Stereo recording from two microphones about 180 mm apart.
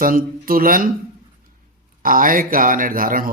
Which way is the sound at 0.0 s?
50° right (ahead or behind).